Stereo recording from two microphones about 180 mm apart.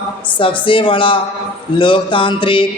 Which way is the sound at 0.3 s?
30° left (ahead or behind).